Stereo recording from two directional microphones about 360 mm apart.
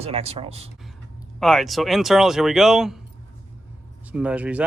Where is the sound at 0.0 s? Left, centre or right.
Centre.